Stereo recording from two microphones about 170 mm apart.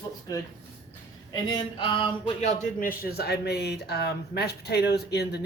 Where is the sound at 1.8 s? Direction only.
30° left (ahead or behind).